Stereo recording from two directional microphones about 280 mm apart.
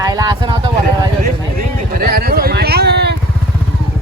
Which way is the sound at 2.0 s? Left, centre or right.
Right.